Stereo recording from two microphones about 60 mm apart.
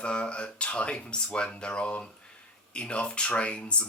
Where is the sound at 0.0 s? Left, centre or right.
Centre.